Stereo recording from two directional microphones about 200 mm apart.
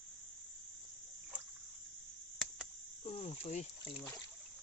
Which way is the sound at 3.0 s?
30° left (ahead or behind).